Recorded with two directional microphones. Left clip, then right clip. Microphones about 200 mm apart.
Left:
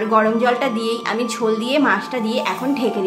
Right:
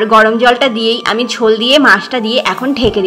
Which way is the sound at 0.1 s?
25° right (ahead or behind).